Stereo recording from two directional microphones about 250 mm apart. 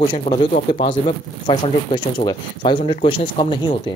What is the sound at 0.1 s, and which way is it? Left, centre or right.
Speech, left.